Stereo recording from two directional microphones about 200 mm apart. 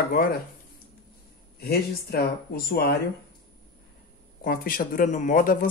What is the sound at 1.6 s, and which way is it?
Speech, 50° left (ahead or behind).